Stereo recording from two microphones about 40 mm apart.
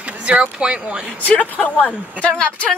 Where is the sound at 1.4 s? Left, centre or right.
Left.